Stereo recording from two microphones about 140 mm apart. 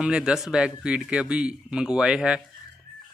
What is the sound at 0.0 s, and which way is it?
A man's voice, 5° right (ahead or behind).